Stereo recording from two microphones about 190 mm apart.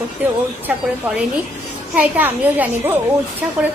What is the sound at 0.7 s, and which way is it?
Speech, 5° right (ahead or behind).